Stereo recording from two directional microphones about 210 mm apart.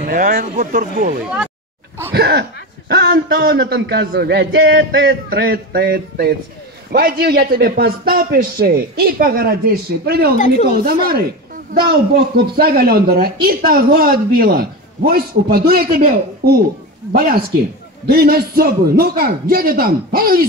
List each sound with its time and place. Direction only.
0.0 s speech: 40° right (ahead or behind)
2.1 s speech: 50° right (ahead or behind)
10.3 s a woman's voice: 35° left (ahead or behind)
10.7 s speech: 45° right (ahead or behind)